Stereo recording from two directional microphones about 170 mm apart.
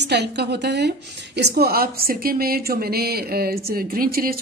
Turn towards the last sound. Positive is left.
turn(degrees=-60)  # may be behind; listen again after turning